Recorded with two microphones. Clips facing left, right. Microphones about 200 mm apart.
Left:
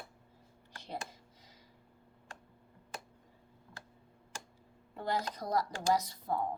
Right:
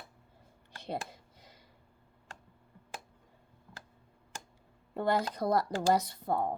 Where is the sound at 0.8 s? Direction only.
60° right (ahead or behind).